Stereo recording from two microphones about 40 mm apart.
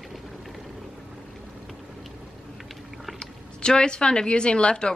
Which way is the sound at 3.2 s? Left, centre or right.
Left.